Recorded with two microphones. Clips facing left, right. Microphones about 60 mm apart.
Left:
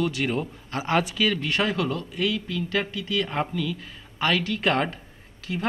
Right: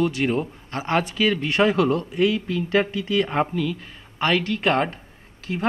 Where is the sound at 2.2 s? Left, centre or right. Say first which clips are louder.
Right 3 dB; right.